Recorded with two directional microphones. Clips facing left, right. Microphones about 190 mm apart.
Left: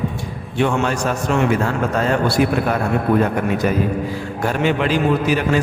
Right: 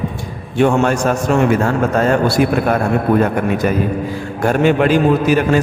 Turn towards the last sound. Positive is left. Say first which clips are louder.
# right 4 dB
turn(degrees=-50)  # may be behind; listen again after turning